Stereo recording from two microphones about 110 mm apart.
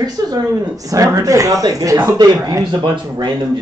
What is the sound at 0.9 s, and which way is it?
Speech, 30° right (ahead or behind).